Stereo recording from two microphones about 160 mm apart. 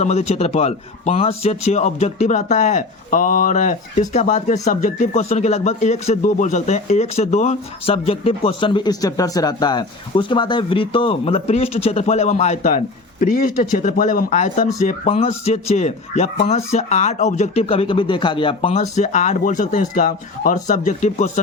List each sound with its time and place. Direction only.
0.0 s a man's voice: 45° left (ahead or behind)
12.6 s a man's voice: 60° left (ahead or behind)